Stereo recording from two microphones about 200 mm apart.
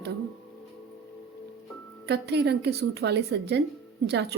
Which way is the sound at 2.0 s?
55° right (ahead or behind).